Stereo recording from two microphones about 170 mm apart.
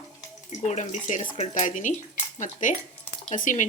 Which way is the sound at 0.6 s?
40° left (ahead or behind).